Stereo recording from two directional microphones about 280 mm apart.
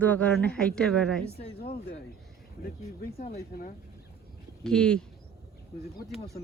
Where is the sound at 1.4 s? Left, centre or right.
Left.